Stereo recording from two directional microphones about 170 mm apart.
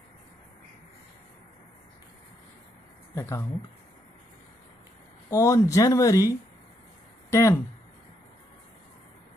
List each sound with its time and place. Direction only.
3.2 s speech: 20° left (ahead or behind)
5.3 s speech: 15° left (ahead or behind)